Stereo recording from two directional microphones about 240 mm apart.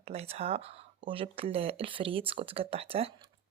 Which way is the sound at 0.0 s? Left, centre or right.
Right.